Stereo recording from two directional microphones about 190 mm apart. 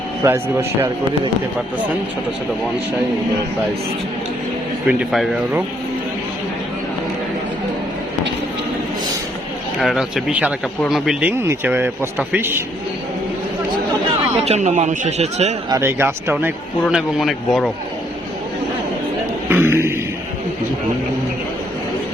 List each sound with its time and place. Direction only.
0.2 s speech: 15° right (ahead or behind)
4.9 s speech: 5° right (ahead or behind)
9.8 s speech: centre (ahead or behind)
14.3 s a man's voice: 35° right (ahead or behind)
15.7 s speech: 10° right (ahead or behind)
16.8 s speech: centre (ahead or behind)
19.5 s a sound: 10° right (ahead or behind)